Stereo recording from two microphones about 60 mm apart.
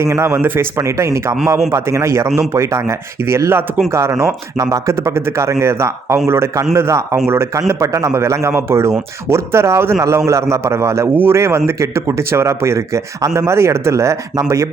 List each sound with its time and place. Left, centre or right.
0.0 s speech: right
0.3 s a man's voice: right
4.5 s a man's voice: right
7.7 s speech: right
8.2 s a man's voice: right
13.5 s speech: right